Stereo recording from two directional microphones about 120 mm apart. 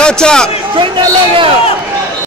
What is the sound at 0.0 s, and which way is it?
Speech, 5° left (ahead or behind).